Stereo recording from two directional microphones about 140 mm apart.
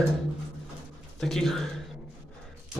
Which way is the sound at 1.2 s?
Centre (ahead or behind).